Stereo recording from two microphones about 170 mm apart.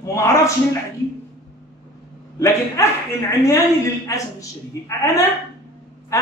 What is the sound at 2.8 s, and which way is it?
Speech, 15° left (ahead or behind).